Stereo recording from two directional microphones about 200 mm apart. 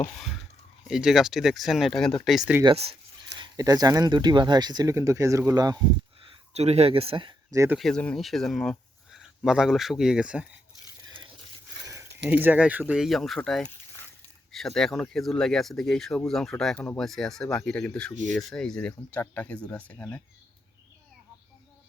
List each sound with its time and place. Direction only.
0.0 s speech: centre (ahead or behind)
2.6 s speech: 30° right (ahead or behind)
6.2 s speech: 30° right (ahead or behind); by 7.8 s 15° right (ahead or behind)
7.8 s speech: 5° left (ahead or behind)
11.9 s speech: 10° right (ahead or behind); by 20.2 s 5° left (ahead or behind)